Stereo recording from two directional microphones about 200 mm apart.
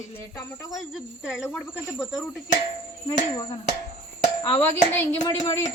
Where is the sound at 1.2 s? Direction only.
10° left (ahead or behind).